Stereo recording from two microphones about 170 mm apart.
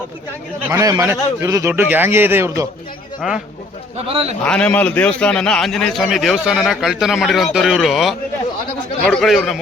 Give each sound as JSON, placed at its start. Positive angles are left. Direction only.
{"t": 0.7, "sound": "a man's voice", "side_deg": -20}
{"t": 3.2, "sound": "speech", "side_deg": -5}
{"t": 3.9, "sound": "speech", "side_deg": -35}
{"t": 4.4, "sound": "a man's voice", "side_deg": 5}